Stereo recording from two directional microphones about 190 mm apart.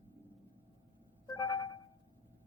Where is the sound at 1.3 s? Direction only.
15° left (ahead or behind).